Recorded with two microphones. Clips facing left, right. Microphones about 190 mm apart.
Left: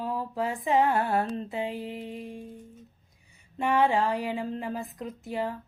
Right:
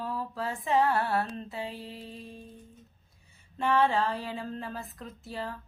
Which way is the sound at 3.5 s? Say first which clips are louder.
Left 2 dB; 15° left (ahead or behind).